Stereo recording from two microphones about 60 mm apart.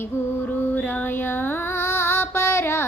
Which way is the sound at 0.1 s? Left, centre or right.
Left.